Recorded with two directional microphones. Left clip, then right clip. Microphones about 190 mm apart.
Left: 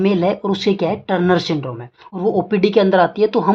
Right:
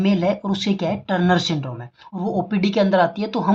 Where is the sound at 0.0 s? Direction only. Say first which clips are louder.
Left 4 dB; 25° left (ahead or behind).